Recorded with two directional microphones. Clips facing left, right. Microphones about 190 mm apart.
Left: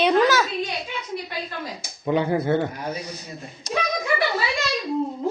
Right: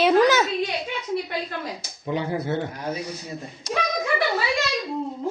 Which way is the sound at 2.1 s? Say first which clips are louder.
Left 5 dB; 55° left (ahead or behind).